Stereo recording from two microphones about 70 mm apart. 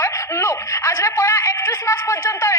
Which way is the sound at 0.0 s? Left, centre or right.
Left.